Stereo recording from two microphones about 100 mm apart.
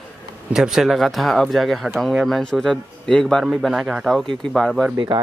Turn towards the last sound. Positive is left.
turn(degrees=0)  # may be behind; listen again after turning